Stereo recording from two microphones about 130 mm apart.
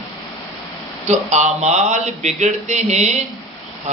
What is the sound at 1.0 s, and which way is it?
Speech, 65° right (ahead or behind).